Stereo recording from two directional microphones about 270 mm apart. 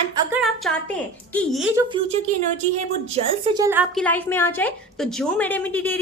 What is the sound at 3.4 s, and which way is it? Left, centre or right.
Speech, centre.